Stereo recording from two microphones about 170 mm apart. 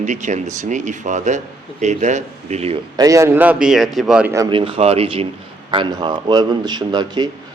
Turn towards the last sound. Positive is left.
turn(degrees=-25)  # may be behind; listen again after turning